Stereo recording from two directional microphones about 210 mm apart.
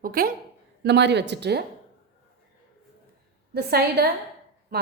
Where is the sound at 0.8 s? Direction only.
55° right (ahead or behind).